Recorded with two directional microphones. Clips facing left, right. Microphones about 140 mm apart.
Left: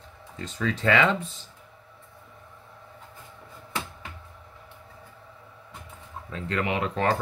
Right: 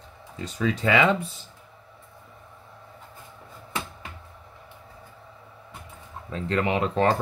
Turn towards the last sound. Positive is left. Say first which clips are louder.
# right 3 dB
turn(degrees=-30)  # may be behind; listen again after turning